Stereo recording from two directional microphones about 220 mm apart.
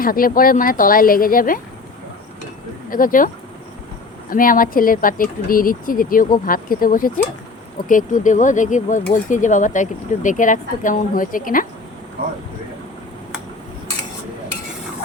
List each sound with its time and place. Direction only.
0.0 s speech: 40° left (ahead or behind)
2.9 s speech: 40° left (ahead or behind)
4.3 s speech: 40° left (ahead or behind)